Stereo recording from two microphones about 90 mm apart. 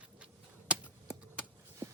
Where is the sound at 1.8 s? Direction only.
30° right (ahead or behind).